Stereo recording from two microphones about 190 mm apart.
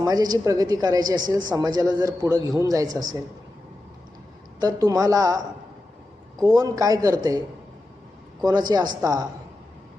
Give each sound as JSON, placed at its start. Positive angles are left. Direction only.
{"t": 0.0, "sound": "a woman's voice", "side_deg": -20}
{"t": 4.6, "sound": "speech", "side_deg": -20}
{"t": 6.4, "sound": "a woman's voice", "side_deg": -20}
{"t": 8.4, "sound": "a woman's voice", "side_deg": -20}